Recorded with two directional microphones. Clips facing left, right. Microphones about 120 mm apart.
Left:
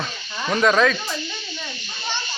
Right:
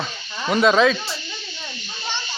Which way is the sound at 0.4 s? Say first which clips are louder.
Right 2 dB; 10° right (ahead or behind).